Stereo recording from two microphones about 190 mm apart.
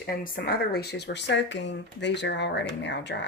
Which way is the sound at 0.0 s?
50° left (ahead or behind).